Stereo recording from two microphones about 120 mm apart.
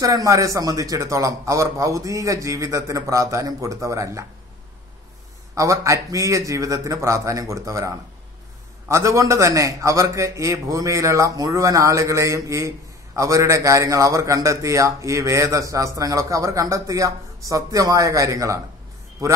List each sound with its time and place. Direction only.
0.0 s a man's voice: 30° right (ahead or behind)
5.5 s a man's voice: 25° right (ahead or behind)